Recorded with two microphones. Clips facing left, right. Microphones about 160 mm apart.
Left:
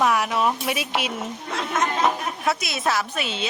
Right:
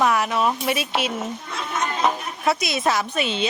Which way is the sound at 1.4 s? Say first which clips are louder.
Left 2 dB; 90° left.